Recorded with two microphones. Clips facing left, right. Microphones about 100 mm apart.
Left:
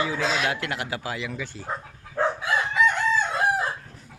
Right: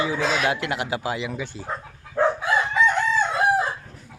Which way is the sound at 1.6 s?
5° left (ahead or behind).